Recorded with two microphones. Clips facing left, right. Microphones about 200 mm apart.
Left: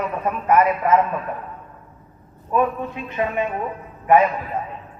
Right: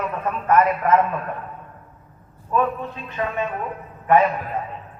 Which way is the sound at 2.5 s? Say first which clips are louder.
Left 2 dB; 15° left (ahead or behind).